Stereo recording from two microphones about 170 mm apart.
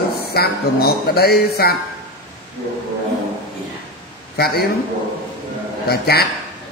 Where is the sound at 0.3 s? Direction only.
65° left (ahead or behind).